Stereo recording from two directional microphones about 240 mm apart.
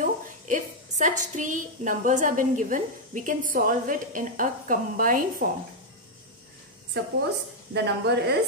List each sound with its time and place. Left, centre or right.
0.0 s a sound: right
1.2 s a woman's voice: right
7.0 s a woman's voice: right